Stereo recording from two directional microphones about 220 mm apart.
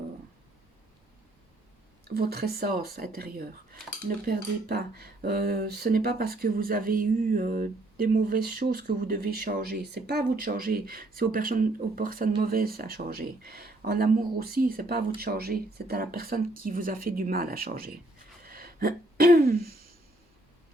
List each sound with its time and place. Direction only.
2.0 s speech: 45° right (ahead or behind)
18.4 s throat clearing: 40° right (ahead or behind)